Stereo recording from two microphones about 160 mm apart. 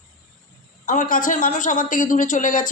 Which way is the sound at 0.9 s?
55° left (ahead or behind).